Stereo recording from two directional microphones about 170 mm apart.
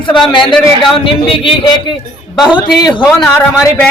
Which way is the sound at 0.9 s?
30° left (ahead or behind).